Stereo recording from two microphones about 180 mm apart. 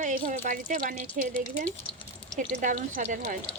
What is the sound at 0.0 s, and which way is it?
Speech, 50° right (ahead or behind).